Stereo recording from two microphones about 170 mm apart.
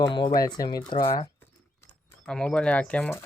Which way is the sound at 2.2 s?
5° left (ahead or behind).